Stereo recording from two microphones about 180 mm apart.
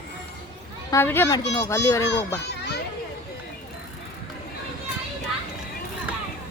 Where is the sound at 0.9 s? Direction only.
15° left (ahead or behind).